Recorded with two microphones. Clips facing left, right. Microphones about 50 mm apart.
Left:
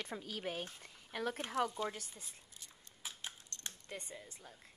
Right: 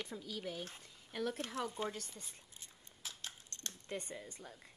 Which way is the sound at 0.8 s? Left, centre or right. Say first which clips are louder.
Right 1 dB; left.